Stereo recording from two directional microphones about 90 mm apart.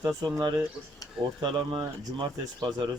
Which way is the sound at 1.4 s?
65° right (ahead or behind).